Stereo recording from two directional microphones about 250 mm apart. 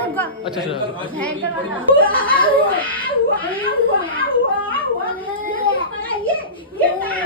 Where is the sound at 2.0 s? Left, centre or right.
Left.